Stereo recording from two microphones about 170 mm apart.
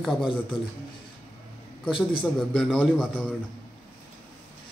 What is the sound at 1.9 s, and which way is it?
Speech, 30° left (ahead or behind).